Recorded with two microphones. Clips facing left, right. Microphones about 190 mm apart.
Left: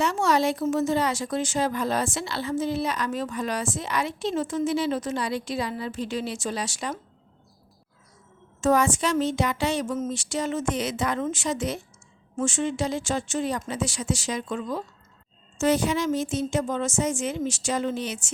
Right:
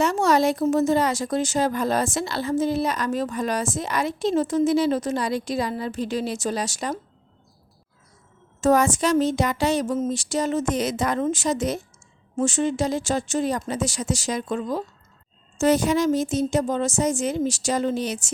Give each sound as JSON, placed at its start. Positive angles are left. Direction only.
{"t": 0.0, "sound": "a woman's voice", "side_deg": -40}
{"t": 8.6, "sound": "a woman's voice", "side_deg": -40}